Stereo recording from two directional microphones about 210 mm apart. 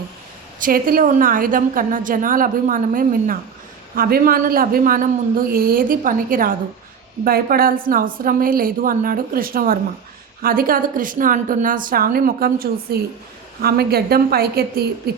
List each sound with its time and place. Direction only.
0.6 s a woman's voice: 40° right (ahead or behind)